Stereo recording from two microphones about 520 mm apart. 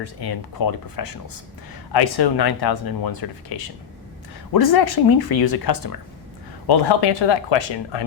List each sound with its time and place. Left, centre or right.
0.0 s speech: left